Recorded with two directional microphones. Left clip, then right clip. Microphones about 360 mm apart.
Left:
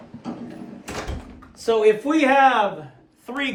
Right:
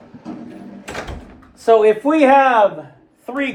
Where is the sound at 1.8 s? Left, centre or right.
Centre.